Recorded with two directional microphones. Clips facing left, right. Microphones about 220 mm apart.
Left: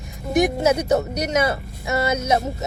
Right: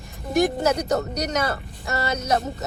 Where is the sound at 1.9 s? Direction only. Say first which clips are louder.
Left 5 dB; 20° left (ahead or behind).